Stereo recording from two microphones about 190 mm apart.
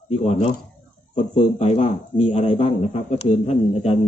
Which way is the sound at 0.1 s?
35° left (ahead or behind).